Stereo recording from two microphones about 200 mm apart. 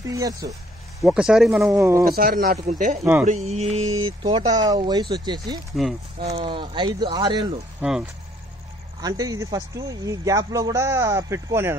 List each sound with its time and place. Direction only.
0.1 s a man's voice: 15° right (ahead or behind)
1.0 s speech: 5° right (ahead or behind)
1.8 s a man's voice: 15° right (ahead or behind)
2.0 s speech: 50° right (ahead or behind)
3.0 s a man's voice: 5° right (ahead or behind)
3.3 s speech: 35° right (ahead or behind)
5.8 s speech: centre (ahead or behind)
6.2 s speech: 25° right (ahead or behind)
9.0 s a man's voice: 20° right (ahead or behind)